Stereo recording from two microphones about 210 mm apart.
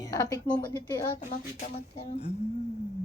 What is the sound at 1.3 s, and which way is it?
Speech, 35° left (ahead or behind).